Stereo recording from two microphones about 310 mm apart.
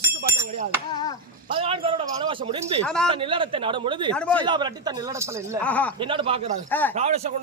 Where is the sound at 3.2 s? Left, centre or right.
Centre.